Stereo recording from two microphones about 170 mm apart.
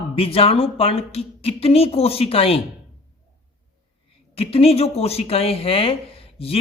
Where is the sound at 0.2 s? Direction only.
35° left (ahead or behind).